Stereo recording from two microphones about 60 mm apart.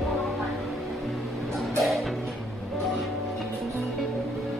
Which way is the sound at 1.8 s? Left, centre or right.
Centre.